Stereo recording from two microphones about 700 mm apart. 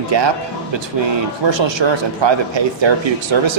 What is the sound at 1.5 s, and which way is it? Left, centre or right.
A man's voice, right.